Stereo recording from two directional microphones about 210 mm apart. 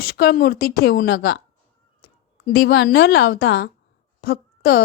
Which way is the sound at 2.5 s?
55° left (ahead or behind).